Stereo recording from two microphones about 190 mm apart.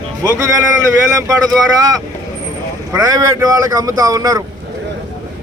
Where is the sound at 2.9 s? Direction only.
15° right (ahead or behind).